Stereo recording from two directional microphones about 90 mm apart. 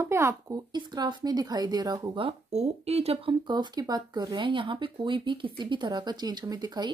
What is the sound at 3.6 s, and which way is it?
Speech, 50° right (ahead or behind).